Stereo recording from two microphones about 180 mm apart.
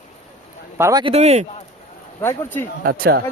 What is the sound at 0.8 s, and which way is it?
Speech, 20° right (ahead or behind).